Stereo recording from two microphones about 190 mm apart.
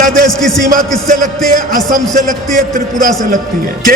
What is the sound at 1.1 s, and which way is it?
Speech, 45° right (ahead or behind).